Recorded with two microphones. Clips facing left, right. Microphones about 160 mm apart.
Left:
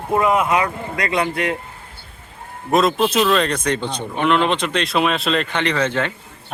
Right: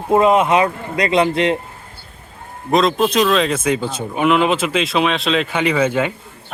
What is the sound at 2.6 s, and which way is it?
Speech, 5° left (ahead or behind).